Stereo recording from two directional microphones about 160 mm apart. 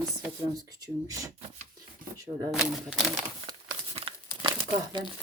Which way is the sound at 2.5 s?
5° right (ahead or behind).